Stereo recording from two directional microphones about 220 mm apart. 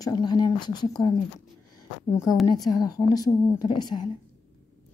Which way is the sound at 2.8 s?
15° left (ahead or behind).